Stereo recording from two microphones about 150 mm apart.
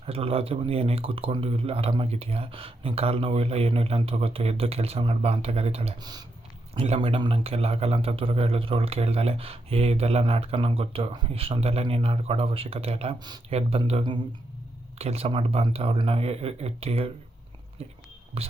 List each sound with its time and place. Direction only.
0.0 s speech: 40° right (ahead or behind)
6.0 s speech: 25° right (ahead or behind)
6.7 s speech: 45° right (ahead or behind)
18.4 s speech: 40° right (ahead or behind)